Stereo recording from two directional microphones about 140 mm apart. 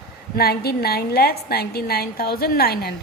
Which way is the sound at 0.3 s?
90° left.